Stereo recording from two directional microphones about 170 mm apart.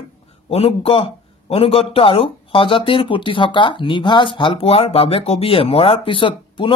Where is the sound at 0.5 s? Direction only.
35° left (ahead or behind).